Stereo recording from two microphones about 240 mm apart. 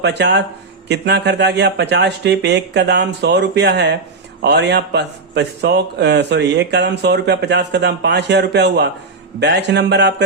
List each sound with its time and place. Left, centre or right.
0.0 s a man's voice: right